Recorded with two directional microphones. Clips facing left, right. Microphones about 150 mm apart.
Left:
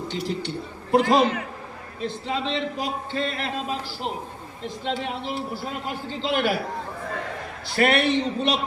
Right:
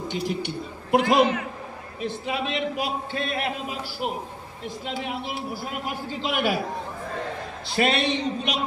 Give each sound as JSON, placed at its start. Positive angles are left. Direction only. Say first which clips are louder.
{"t": 0.1, "sound": "a man's voice", "louder": "right 1 dB", "side_deg": -15}
{"t": 4.9, "sound": "a man's voice", "louder": "left 3 dB", "side_deg": -10}
{"t": 7.7, "sound": "a man's voice", "louder": "left 3 dB", "side_deg": -20}